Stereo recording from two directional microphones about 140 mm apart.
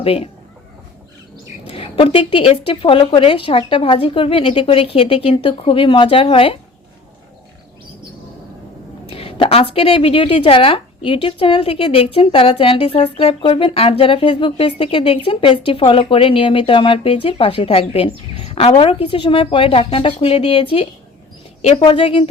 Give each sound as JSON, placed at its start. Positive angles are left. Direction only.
{"t": 0.0, "sound": "a man's voice", "side_deg": 45}
{"t": 1.6, "sound": "a woman's voice", "side_deg": 40}
{"t": 9.0, "sound": "a woman's voice", "side_deg": 40}